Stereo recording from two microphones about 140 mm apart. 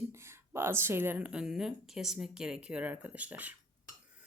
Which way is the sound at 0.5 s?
15° right (ahead or behind).